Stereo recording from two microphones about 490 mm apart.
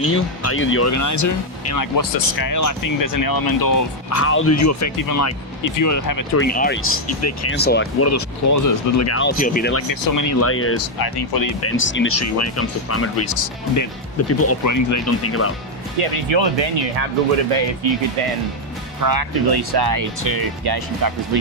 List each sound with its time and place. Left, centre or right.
0.0 s speech: left
6.3 s speech: centre
7.5 s speech: centre
9.9 s speech: left
10.4 s speech: left
11.3 s speech: left
11.6 s speech: left
16.0 s speech: right
17.8 s speech: right
18.9 s speech: right